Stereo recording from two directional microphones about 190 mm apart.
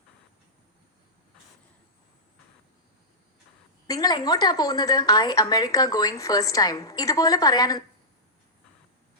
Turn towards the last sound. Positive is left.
turn(degrees=20)  # may be behind; listen again after turning